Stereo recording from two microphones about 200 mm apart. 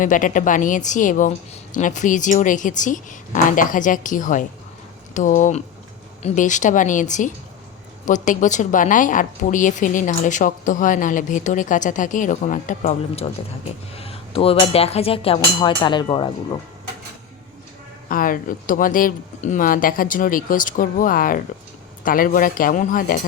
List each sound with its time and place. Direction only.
0.0 s a woman's voice: 40° left (ahead or behind); by 16.6 s 25° left (ahead or behind)
18.1 s speech: 45° left (ahead or behind)